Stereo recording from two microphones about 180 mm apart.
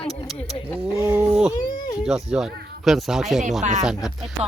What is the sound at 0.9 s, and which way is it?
Speech, 15° right (ahead or behind).